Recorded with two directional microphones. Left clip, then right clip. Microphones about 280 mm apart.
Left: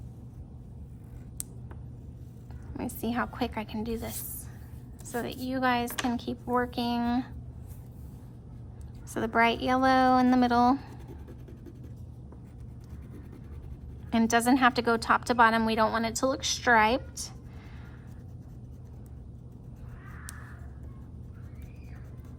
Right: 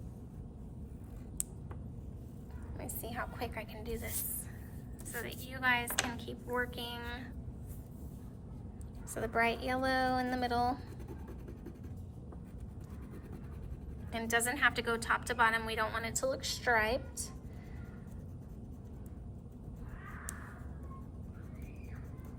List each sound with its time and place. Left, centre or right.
3.1 s speech: centre
5.1 s a woman's voice: centre
9.1 s speech: centre
14.1 s a woman's voice: centre